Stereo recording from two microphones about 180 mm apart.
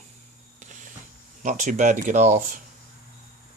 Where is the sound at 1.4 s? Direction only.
45° right (ahead or behind).